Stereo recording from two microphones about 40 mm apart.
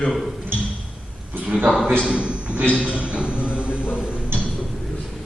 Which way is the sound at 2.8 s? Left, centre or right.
Left.